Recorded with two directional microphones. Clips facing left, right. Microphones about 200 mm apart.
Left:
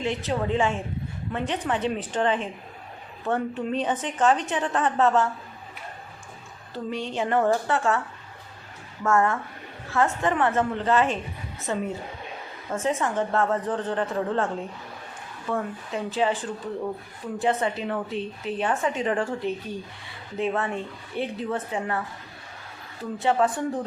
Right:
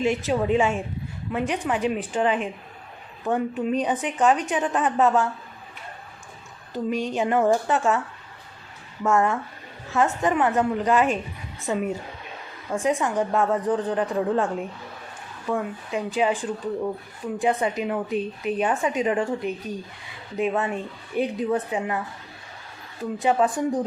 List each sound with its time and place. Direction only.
0.3 s a woman's voice: 15° right (ahead or behind)
6.7 s a woman's voice: 15° right (ahead or behind)
9.0 s a woman's voice: 15° right (ahead or behind)
15.4 s a woman's voice: 15° right (ahead or behind)
23.1 s a woman's voice: 15° right (ahead or behind)